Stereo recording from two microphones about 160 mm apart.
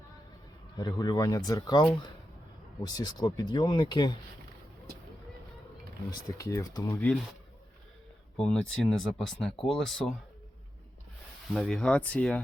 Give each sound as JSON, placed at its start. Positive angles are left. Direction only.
{"t": 0.8, "sound": "speech", "side_deg": 25}
{"t": 6.1, "sound": "speech", "side_deg": 20}
{"t": 8.4, "sound": "speech", "side_deg": 5}
{"t": 11.5, "sound": "speech", "side_deg": 5}